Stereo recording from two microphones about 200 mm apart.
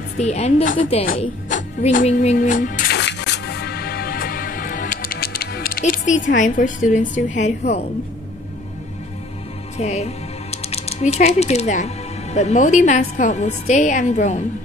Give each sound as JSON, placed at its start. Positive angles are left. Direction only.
{"t": 0.2, "sound": "a woman's voice", "side_deg": 35}
{"t": 1.5, "sound": "music", "side_deg": 40}
{"t": 9.8, "sound": "speech", "side_deg": 30}